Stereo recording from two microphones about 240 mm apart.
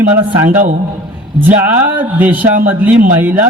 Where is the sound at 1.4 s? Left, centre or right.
Centre.